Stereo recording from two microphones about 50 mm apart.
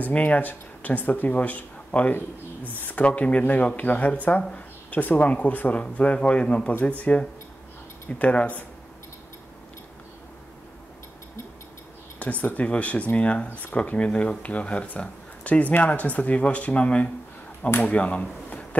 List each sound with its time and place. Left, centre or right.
0.0 s speech: left
12.2 s speech: left
13.5 s speech: left
13.9 s speech: left
18.5 s a sound: left